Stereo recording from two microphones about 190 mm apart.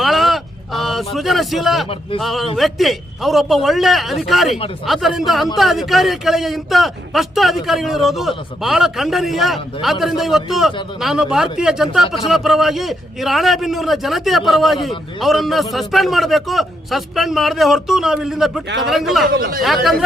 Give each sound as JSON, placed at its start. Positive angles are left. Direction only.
{"t": 0.0, "sound": "a sound", "side_deg": 0}
{"t": 2.2, "sound": "a man's voice", "side_deg": 0}
{"t": 19.3, "sound": "speech", "side_deg": -50}
{"t": 19.6, "sound": "a man's voice", "side_deg": 0}